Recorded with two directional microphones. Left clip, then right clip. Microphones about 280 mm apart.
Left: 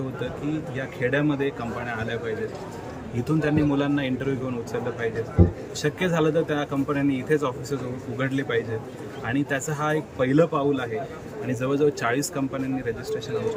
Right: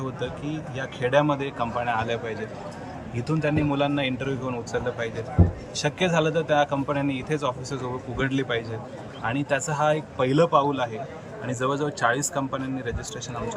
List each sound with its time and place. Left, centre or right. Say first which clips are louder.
0.8 s a man's voice: right 4 dB; centre